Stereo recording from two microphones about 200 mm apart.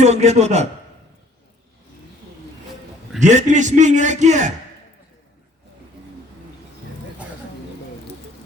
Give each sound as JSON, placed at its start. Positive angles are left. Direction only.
{"t": 0.0, "sound": "a man's voice", "side_deg": -35}
{"t": 3.2, "sound": "a man's voice", "side_deg": -35}